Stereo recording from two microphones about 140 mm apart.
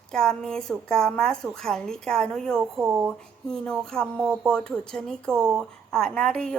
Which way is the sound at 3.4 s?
5° left (ahead or behind).